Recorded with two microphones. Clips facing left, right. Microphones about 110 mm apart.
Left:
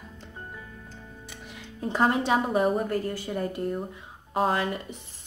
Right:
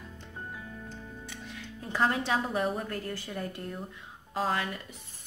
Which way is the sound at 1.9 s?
25° left (ahead or behind).